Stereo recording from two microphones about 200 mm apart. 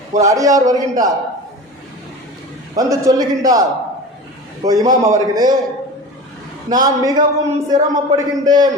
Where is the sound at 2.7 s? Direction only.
20° right (ahead or behind).